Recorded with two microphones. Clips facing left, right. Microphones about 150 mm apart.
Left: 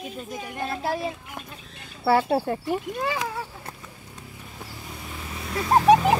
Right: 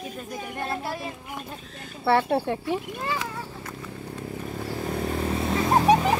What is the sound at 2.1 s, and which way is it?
Speech, 10° left (ahead or behind).